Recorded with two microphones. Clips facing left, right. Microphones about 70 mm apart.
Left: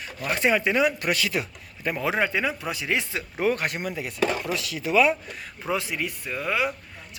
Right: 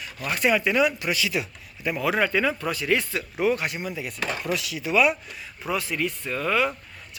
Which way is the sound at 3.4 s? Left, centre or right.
Left.